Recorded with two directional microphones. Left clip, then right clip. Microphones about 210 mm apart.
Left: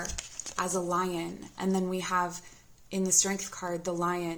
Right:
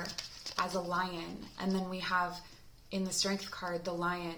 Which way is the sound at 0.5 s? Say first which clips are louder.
Left 4 dB; 40° left (ahead or behind).